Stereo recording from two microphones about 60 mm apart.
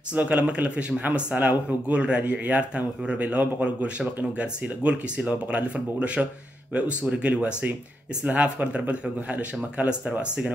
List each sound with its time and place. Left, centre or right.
0.1 s speech: right